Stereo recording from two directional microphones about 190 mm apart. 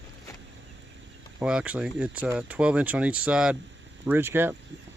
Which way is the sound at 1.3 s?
5° right (ahead or behind).